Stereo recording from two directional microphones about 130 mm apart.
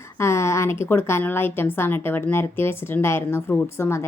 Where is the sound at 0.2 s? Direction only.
20° left (ahead or behind).